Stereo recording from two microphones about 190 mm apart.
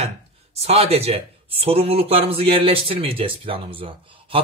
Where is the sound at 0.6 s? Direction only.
30° right (ahead or behind).